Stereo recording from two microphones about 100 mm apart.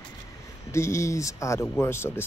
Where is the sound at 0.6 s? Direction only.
30° left (ahead or behind).